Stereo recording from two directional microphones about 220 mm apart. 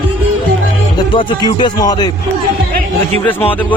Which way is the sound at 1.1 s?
20° left (ahead or behind).